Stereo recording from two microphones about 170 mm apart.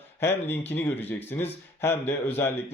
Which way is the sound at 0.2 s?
15° left (ahead or behind).